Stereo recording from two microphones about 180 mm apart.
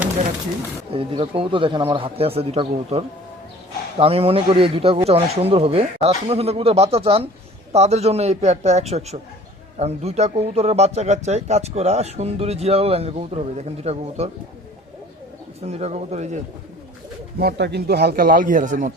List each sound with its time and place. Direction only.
0.9 s a man's voice: 30° right (ahead or behind)
15.6 s a man's voice: 35° right (ahead or behind)
17.4 s speech: 65° right (ahead or behind); by 18.9 s 45° right (ahead or behind)